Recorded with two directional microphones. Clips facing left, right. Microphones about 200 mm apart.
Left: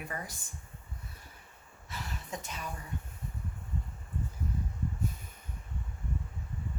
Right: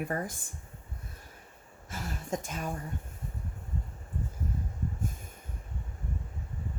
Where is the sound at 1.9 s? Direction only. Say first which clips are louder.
Right 6 dB; 45° right (ahead or behind).